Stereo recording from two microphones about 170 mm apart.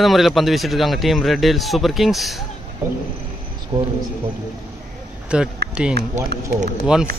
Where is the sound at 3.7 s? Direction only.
30° right (ahead or behind).